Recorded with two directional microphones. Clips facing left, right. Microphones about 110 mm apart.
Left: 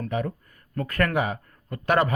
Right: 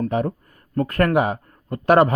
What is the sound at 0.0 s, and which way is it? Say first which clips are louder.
Speech: right 6 dB; 40° right (ahead or behind).